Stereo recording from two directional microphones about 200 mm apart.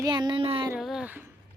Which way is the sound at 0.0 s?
20° right (ahead or behind).